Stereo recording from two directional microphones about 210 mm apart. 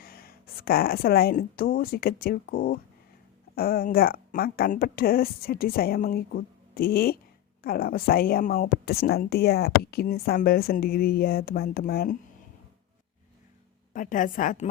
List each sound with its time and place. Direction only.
0.0 s a woman's voice: 45° left (ahead or behind)
13.9 s a woman's voice: 40° left (ahead or behind)